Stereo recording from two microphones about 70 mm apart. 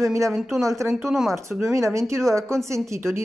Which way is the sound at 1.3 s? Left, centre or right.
Right.